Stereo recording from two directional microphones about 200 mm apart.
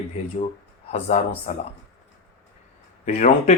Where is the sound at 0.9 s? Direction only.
35° left (ahead or behind).